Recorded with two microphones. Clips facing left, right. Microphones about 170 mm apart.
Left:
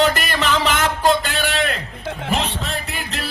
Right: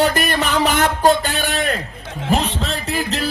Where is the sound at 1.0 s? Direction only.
40° right (ahead or behind).